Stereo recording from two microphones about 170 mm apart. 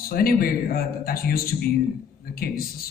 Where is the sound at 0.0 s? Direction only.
60° left (ahead or behind).